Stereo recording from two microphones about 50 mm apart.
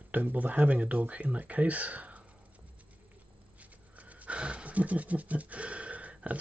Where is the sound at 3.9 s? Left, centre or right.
Right.